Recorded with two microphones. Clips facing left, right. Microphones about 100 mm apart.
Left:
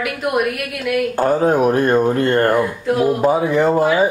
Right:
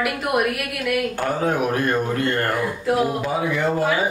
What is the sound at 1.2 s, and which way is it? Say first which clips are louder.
Speech: left 7 dB; 35° left (ahead or behind).